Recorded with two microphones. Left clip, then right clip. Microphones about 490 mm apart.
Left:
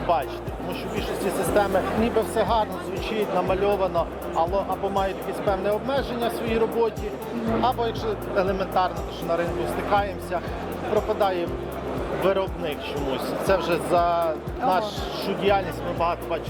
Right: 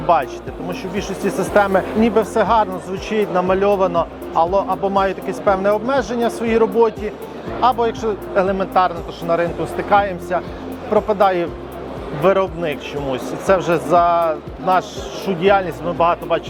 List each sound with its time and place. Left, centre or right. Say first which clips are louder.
1.5 s speech: right 8 dB; right
16.0 s speech: right 10 dB; right